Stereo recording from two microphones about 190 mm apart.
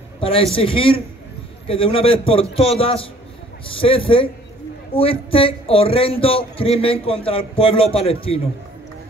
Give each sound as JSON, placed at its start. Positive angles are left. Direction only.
{"t": 0.2, "sound": "a man's voice", "side_deg": 30}